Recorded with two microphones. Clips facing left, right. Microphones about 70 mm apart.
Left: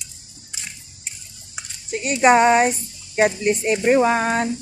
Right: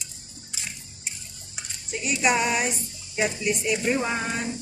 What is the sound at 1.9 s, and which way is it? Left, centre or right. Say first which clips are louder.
A woman's voice: left 9 dB; left.